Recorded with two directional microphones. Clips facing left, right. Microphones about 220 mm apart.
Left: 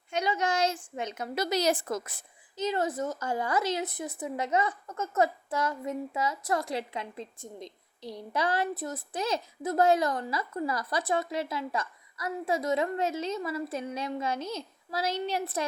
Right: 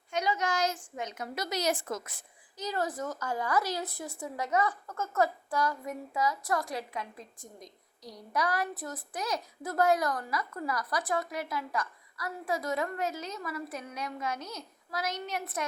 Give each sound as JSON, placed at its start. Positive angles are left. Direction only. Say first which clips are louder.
{"t": 0.1, "sound": "a woman's voice", "louder": "left 2 dB", "side_deg": 30}